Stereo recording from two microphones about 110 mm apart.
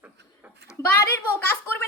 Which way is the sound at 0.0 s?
15° right (ahead or behind).